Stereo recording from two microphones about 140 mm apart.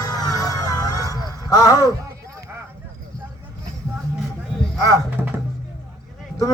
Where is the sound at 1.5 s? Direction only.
25° left (ahead or behind).